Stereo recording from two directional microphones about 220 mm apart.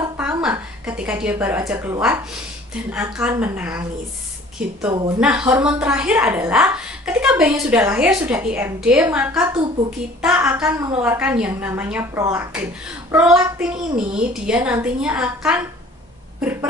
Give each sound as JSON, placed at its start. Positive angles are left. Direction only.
{"t": 0.0, "sound": "a woman's voice", "side_deg": -5}